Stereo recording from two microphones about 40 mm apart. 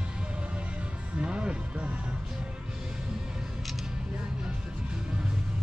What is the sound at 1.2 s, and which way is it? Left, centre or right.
Music, right.